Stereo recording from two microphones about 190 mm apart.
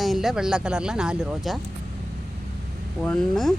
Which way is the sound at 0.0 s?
Centre (ahead or behind).